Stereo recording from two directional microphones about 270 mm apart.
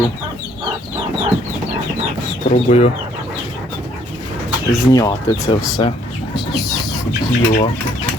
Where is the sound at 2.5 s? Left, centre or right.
Left.